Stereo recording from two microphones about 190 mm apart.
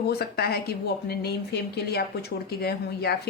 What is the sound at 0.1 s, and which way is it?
Speech, 55° left (ahead or behind).